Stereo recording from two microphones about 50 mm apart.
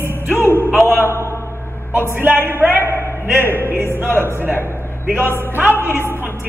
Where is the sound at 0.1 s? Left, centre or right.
Left.